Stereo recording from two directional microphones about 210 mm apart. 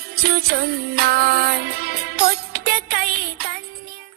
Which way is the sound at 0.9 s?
45° right (ahead or behind).